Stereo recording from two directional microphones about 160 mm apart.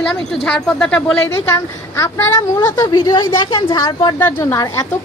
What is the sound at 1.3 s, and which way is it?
A woman's voice, 20° left (ahead or behind).